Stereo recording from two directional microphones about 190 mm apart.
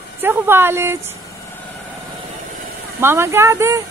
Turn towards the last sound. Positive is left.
turn(degrees=-15)  # may be behind; listen again after turning